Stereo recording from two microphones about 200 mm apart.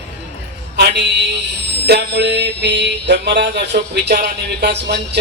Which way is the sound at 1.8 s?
55° right (ahead or behind).